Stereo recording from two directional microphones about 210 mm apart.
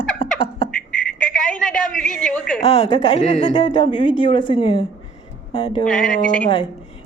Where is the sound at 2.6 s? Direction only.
30° left (ahead or behind).